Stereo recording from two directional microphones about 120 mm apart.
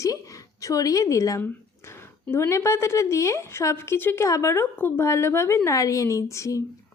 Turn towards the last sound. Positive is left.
turn(degrees=25)  # may be behind; listen again after turning